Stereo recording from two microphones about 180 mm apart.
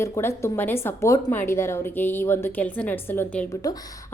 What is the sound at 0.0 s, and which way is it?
A woman's voice, 15° left (ahead or behind).